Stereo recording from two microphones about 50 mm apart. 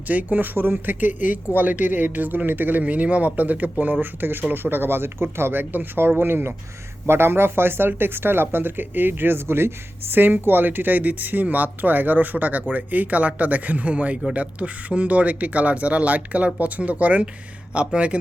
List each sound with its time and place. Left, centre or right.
0.1 s speech: right
2.8 s speech: right